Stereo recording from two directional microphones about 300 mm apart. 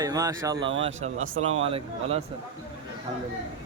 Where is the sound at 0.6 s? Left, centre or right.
Right.